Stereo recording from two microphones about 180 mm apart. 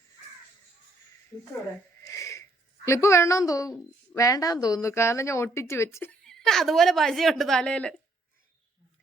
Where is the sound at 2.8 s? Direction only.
15° left (ahead or behind).